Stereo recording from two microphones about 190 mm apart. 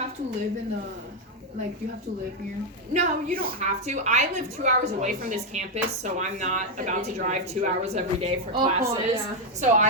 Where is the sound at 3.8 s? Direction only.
40° right (ahead or behind).